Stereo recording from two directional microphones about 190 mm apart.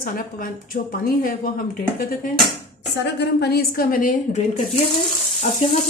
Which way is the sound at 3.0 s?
60° left (ahead or behind).